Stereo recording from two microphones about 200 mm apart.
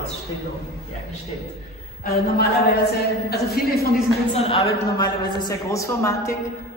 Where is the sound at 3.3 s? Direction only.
50° left (ahead or behind).